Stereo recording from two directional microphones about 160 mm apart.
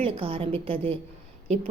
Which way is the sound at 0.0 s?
35° right (ahead or behind).